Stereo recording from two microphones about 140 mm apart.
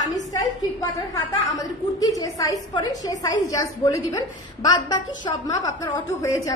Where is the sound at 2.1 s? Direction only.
25° left (ahead or behind).